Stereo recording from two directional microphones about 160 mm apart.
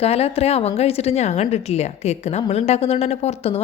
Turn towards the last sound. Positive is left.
turn(degrees=40)  # may be behind; listen again after turning